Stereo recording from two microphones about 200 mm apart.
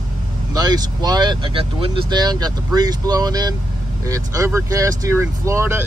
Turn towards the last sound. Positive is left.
turn(degrees=-10)  # may be behind; listen again after turning